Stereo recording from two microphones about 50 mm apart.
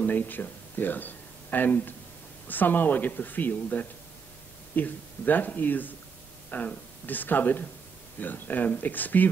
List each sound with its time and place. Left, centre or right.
0.0 s speech: left